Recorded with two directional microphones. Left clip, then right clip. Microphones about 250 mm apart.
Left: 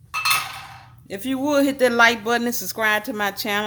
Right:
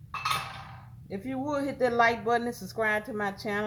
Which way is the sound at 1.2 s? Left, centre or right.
Left.